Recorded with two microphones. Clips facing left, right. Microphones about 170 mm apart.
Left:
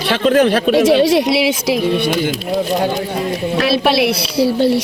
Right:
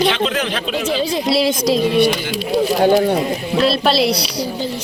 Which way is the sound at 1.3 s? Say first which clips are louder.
Even; 65° left (ahead or behind).